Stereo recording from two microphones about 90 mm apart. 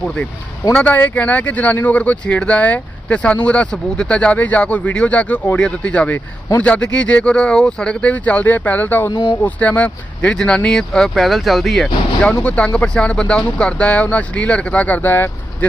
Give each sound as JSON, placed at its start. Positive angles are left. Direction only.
{"t": 0.7, "sound": "speech", "side_deg": 15}
{"t": 12.2, "sound": "speech", "side_deg": 10}